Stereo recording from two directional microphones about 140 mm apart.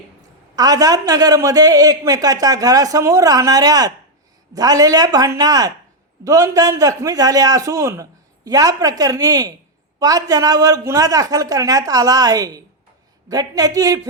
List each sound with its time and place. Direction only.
0.5 s a man's voice: 25° right (ahead or behind)